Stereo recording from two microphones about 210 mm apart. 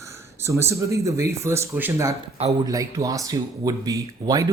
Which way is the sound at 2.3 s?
30° right (ahead or behind).